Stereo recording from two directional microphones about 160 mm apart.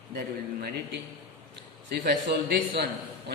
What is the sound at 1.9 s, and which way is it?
Speech, 75° right (ahead or behind).